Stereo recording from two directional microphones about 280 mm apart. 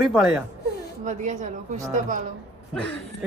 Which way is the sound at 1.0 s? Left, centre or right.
Right.